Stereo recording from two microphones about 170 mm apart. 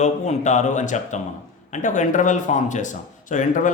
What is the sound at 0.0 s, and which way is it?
A man's voice, 45° left (ahead or behind).